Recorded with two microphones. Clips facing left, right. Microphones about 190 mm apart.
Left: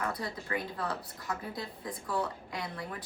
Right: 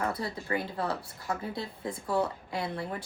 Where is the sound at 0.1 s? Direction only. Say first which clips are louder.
Right 3 dB; 30° right (ahead or behind).